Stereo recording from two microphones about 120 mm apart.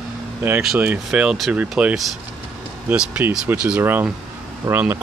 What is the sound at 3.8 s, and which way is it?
Speech, 15° right (ahead or behind).